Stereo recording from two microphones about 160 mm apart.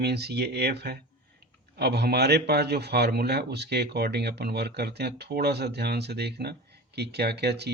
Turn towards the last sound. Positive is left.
turn(degrees=-90)